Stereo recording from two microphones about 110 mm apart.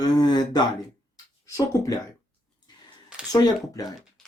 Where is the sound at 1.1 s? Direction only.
35° left (ahead or behind).